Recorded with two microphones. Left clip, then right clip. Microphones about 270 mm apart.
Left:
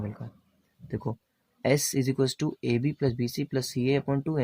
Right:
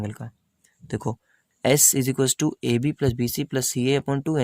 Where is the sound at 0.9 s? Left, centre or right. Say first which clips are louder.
Right 5 dB; right.